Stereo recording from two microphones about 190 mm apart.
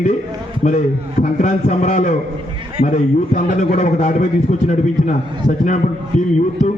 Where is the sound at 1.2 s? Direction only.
35° left (ahead or behind).